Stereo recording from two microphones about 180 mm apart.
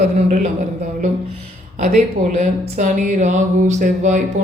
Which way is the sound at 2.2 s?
45° right (ahead or behind).